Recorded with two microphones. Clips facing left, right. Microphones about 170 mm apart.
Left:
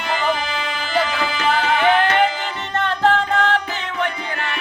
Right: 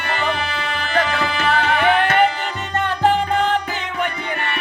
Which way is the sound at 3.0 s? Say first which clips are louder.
Right 1 dB; 15° right (ahead or behind).